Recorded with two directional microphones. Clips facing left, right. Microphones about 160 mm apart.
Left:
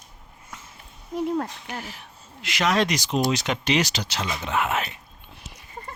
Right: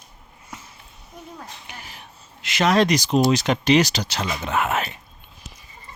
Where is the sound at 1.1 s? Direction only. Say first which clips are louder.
Left 14 dB; 80° left.